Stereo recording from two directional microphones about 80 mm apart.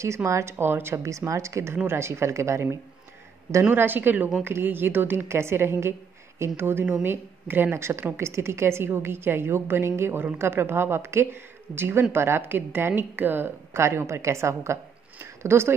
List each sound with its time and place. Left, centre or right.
0.0 s speech: right
3.6 s a woman's voice: right